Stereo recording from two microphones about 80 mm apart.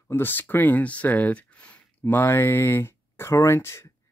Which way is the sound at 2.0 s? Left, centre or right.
Left.